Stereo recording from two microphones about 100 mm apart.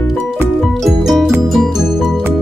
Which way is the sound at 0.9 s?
Centre (ahead or behind).